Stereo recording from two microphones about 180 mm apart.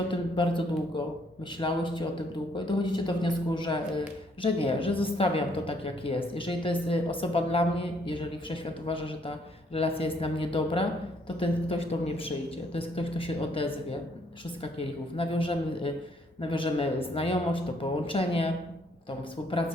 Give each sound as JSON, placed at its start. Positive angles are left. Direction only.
{"t": 0.1, "sound": "a woman's voice", "side_deg": 25}